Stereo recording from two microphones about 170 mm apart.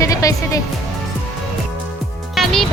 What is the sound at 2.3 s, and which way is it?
Music, centre (ahead or behind).